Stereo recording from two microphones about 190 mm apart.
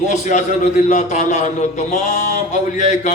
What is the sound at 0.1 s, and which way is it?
A man's voice, 40° left (ahead or behind).